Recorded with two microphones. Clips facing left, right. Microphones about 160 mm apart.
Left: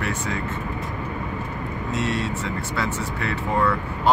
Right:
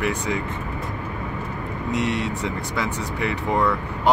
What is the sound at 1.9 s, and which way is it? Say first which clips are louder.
Speech: right 2 dB; 15° right (ahead or behind).